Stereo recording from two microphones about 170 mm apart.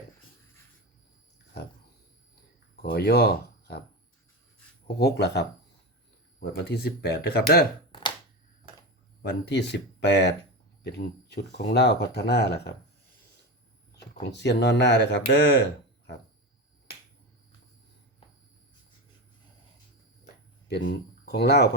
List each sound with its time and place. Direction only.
2.8 s speech: 65° left (ahead or behind)
4.9 s speech: 75° left (ahead or behind)
6.4 s speech: 70° left (ahead or behind)
9.2 s speech: 85° left
10.8 s speech: 75° left (ahead or behind)
13.9 s speech: 85° left
20.8 s speech: 70° left (ahead or behind)